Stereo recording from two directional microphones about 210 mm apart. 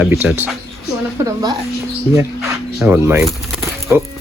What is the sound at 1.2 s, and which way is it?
A woman's voice, 20° right (ahead or behind).